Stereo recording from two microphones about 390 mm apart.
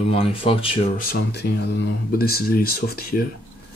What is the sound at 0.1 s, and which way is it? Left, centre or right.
Speech, centre.